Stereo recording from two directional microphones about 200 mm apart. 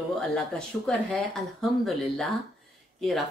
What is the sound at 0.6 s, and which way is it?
Speech, 5° left (ahead or behind).